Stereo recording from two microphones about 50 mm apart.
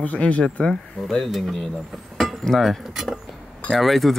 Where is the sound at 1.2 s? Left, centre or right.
Centre.